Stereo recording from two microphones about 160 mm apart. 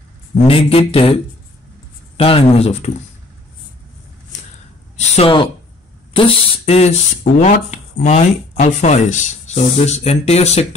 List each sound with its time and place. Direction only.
0.5 s speech: 35° left (ahead or behind)
2.1 s speech: 35° left (ahead or behind)
5.1 s speech: 35° left (ahead or behind)